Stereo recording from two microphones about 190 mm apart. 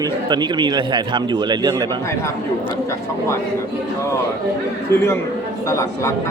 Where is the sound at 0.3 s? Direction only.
25° right (ahead or behind).